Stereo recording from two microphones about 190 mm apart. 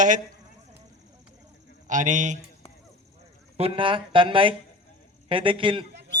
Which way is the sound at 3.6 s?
30° right (ahead or behind).